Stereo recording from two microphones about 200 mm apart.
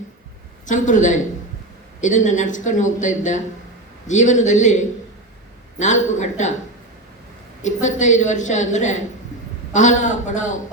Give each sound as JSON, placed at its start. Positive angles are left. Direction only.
{"t": 0.6, "sound": "speech", "side_deg": 40}
{"t": 7.6, "sound": "speech", "side_deg": 40}